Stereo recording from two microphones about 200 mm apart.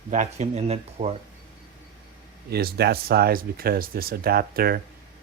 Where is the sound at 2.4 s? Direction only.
55° right (ahead or behind).